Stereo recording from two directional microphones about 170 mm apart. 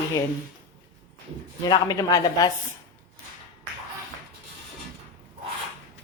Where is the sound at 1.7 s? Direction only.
20° left (ahead or behind).